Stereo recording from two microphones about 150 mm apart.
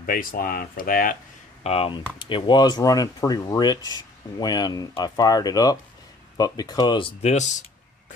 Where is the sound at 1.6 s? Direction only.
40° left (ahead or behind).